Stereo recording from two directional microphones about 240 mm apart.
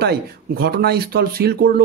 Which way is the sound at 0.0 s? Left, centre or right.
Right.